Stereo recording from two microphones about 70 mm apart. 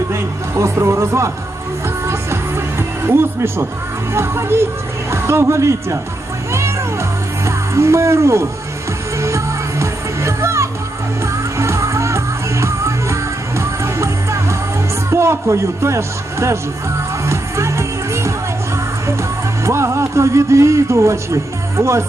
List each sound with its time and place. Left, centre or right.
0.1 s music: right
4.1 s speech: right
6.5 s music: right
7.4 s speech: right
9.2 s music: right
15.1 s speech: right
17.2 s music: right
19.6 s a man's voice: right